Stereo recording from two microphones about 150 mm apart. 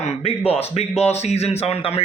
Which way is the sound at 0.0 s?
40° left (ahead or behind).